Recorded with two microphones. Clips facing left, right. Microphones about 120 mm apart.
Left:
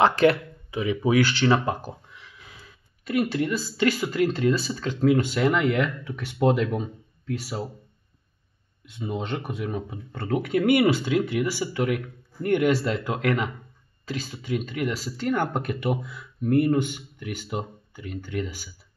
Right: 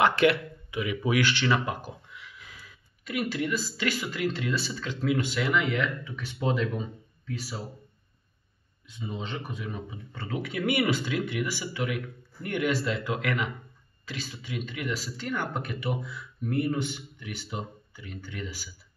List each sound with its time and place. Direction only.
0.0 s speech: 35° left (ahead or behind); by 7.6 s 65° left (ahead or behind)
8.8 s speech: 60° left (ahead or behind); by 18.7 s 45° left (ahead or behind)